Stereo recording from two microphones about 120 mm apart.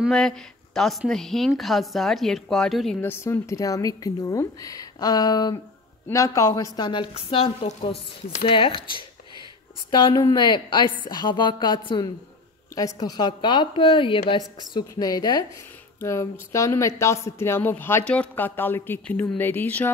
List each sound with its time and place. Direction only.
0.1 s a woman's voice: 5° left (ahead or behind)
3.0 s speech: 20° left (ahead or behind); by 7.1 s 40° left (ahead or behind)
7.2 s speech: 50° left (ahead or behind)
7.6 s a woman's voice: 70° left (ahead or behind)
8.5 s a woman's voice: 45° left (ahead or behind); by 19.9 s 15° left (ahead or behind)